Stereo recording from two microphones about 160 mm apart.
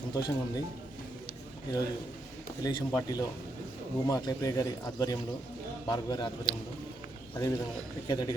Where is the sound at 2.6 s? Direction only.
25° left (ahead or behind).